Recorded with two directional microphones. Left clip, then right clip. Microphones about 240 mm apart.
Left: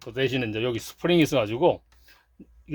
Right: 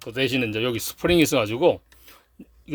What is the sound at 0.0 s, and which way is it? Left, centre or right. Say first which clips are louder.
Speech: right 3 dB; right.